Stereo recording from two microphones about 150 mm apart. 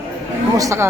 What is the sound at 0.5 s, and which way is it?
Speech, 20° right (ahead or behind).